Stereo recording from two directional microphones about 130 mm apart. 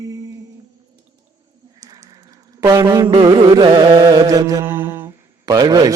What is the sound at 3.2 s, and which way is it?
Carnatic music, 35° right (ahead or behind).